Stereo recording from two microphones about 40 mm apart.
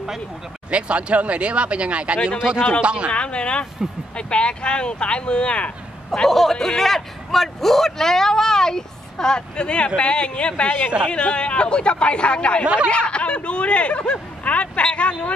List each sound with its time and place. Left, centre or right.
0.7 s speech: right
3.1 s speech: left
6.2 s a man's voice: centre; by 12.6 s left
12.6 s speech: right
12.9 s speech: left